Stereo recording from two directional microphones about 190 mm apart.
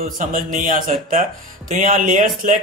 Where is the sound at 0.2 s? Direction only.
45° right (ahead or behind).